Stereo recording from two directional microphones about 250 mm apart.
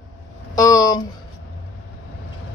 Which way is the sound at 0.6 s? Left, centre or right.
Centre.